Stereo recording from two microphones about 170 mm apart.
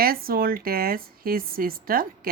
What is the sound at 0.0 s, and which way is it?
A woman's voice, 60° right (ahead or behind).